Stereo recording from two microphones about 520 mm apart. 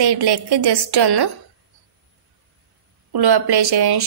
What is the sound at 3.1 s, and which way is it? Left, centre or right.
Speech, right.